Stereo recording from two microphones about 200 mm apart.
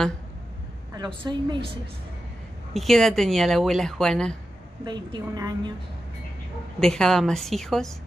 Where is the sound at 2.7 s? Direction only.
Centre (ahead or behind).